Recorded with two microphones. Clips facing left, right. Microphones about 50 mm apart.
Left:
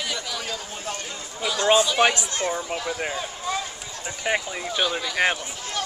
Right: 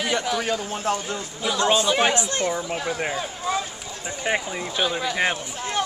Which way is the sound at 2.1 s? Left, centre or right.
Right.